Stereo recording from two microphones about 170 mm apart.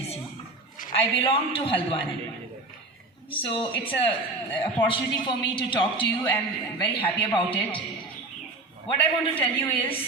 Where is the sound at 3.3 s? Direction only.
30° left (ahead or behind).